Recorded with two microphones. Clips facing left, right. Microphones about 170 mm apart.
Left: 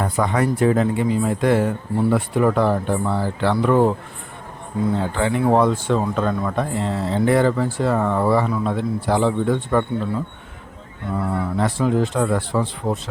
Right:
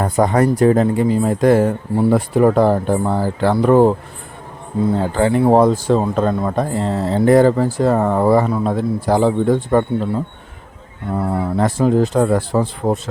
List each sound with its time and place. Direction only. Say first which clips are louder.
0.0 s speech: right 5 dB; 40° right (ahead or behind)
4.9 s speech: right 5 dB; 40° right (ahead or behind)
11.2 s speech: right 4 dB; 30° right (ahead or behind)